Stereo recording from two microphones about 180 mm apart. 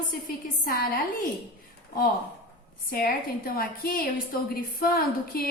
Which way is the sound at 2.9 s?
55° left (ahead or behind).